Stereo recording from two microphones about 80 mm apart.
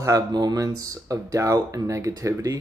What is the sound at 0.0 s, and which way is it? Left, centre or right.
Speech, right.